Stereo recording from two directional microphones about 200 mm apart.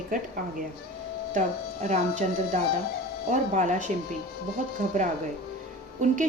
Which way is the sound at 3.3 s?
40° right (ahead or behind).